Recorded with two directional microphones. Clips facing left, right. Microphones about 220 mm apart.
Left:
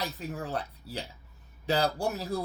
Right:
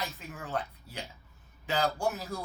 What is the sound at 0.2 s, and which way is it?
Speech, 35° left (ahead or behind).